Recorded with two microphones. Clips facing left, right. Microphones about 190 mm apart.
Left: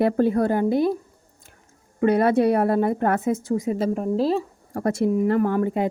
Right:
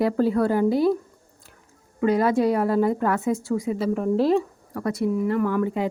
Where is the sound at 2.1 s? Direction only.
60° left (ahead or behind).